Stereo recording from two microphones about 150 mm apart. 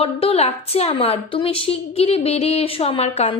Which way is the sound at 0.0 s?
40° left (ahead or behind).